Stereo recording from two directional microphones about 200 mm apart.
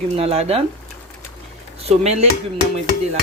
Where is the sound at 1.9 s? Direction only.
30° right (ahead or behind).